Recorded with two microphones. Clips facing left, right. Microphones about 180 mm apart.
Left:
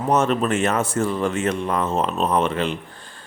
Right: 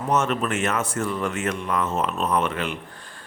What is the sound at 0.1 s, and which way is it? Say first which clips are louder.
Speech: left 4 dB; 35° left (ahead or behind).